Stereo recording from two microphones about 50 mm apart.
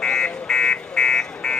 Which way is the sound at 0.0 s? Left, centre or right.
Centre.